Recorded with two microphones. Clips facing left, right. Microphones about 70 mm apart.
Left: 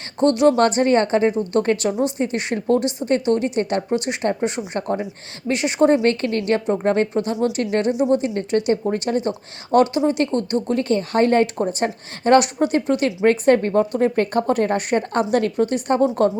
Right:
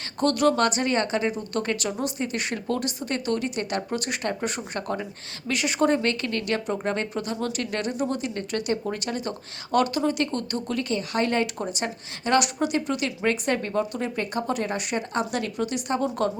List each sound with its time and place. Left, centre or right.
0.2 s a woman's voice: left